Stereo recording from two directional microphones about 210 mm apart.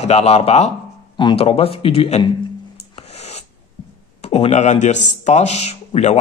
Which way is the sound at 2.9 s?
30° left (ahead or behind).